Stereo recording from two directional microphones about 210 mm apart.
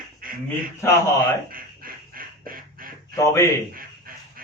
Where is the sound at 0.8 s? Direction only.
15° left (ahead or behind).